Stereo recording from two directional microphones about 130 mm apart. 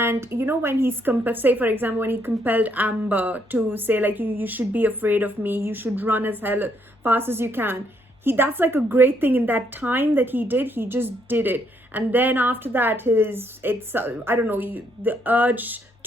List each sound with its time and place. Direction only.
0.0 s a woman's voice: 20° right (ahead or behind)